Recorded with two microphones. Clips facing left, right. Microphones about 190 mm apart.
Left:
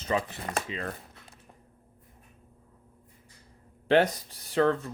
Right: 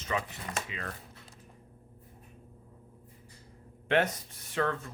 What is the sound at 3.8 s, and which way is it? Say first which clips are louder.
Speech: left 5 dB; 35° left (ahead or behind).